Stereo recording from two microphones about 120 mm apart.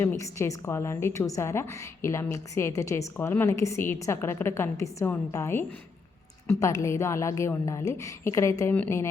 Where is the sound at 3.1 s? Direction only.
15° left (ahead or behind).